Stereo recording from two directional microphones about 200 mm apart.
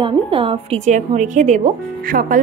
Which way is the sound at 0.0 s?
25° right (ahead or behind).